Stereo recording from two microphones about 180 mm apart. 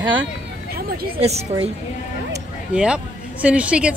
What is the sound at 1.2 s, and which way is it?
Speech, 35° right (ahead or behind).